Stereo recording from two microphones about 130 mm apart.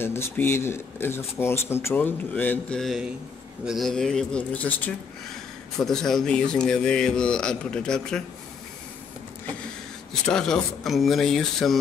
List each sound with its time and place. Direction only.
0.0 s speech: 20° left (ahead or behind)
2.8 s speech: centre (ahead or behind)
10.2 s speech: 5° left (ahead or behind)